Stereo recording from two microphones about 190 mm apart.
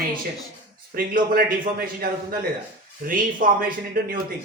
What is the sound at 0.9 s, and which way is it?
A man's voice, 50° right (ahead or behind).